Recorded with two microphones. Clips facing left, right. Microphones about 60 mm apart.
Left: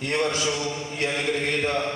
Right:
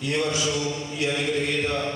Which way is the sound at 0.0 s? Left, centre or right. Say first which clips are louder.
Left 1 dB; left.